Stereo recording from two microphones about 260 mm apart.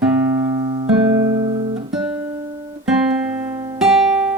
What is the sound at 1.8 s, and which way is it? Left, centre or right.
Guitar, centre.